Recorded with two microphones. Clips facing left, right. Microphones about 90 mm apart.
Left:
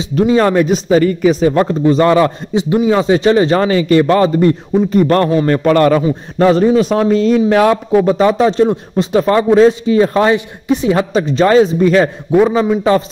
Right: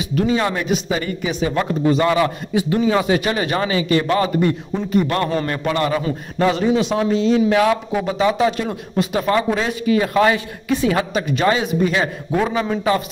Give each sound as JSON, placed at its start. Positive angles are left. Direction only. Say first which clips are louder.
{"t": 0.0, "sound": "a man's voice", "louder": "left 7 dB", "side_deg": 30}
{"t": 2.5, "sound": "a man's voice", "louder": "left 4 dB", "side_deg": 20}
{"t": 12.4, "sound": "a man's voice", "louder": "left 7 dB", "side_deg": 30}